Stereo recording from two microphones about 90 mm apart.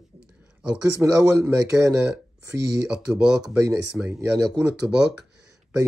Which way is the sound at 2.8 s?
10° right (ahead or behind).